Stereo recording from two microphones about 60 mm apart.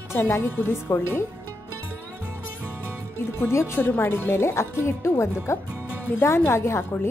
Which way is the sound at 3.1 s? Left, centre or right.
Left.